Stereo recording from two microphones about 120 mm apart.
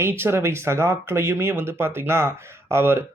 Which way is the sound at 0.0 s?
20° right (ahead or behind).